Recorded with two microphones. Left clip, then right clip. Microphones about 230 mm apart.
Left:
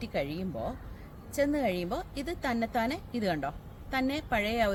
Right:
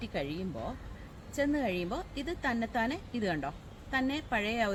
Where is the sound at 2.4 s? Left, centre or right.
Centre.